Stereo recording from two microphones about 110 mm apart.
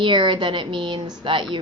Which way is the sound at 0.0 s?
45° right (ahead or behind).